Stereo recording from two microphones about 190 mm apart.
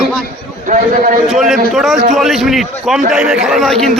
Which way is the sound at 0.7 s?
45° right (ahead or behind).